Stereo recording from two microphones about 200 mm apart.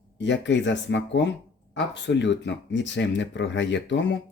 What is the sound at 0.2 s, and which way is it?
Speech, 65° left (ahead or behind).